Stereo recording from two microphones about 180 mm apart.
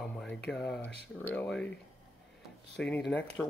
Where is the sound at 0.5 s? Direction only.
5° left (ahead or behind).